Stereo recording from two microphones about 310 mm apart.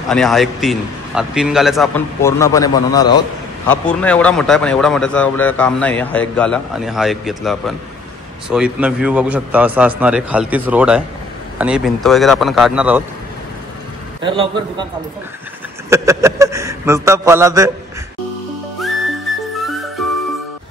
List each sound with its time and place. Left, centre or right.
0.1 s a man's voice: centre
14.2 s a man's voice: centre
15.9 s a man's voice: centre
18.8 s whistle: centre